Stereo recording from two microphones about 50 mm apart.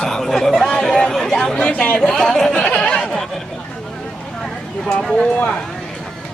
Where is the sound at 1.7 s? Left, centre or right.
Left.